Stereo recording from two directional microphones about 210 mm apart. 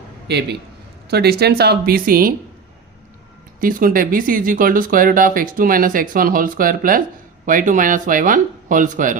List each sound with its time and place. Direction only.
0.3 s speech: 50° right (ahead or behind)
3.6 s speech: 40° right (ahead or behind)